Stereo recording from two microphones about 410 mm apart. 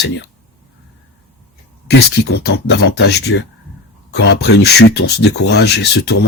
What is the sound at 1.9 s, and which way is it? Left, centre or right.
Speech, left.